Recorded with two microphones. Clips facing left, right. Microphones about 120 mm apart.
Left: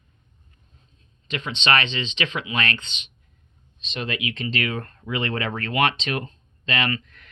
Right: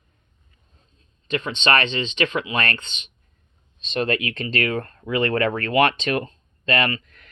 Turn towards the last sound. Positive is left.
turn(degrees=-40)  # may be behind; listen again after turning